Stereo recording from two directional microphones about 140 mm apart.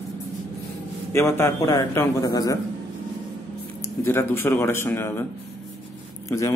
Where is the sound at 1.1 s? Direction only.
20° left (ahead or behind).